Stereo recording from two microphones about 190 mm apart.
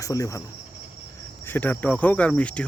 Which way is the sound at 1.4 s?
10° left (ahead or behind).